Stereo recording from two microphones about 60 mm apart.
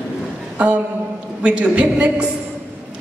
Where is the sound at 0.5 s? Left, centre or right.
Right.